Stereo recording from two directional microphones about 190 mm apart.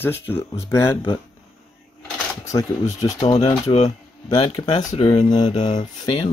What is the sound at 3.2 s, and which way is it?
Speech, 30° left (ahead or behind).